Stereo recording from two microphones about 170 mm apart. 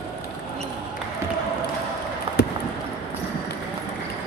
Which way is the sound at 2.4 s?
75° left (ahead or behind).